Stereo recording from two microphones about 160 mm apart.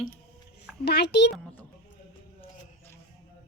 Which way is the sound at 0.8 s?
90° left.